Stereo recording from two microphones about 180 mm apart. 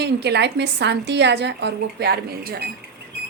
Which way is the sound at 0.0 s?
65° right (ahead or behind).